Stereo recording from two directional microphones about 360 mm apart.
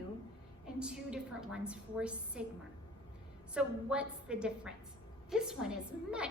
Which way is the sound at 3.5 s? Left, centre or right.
Centre.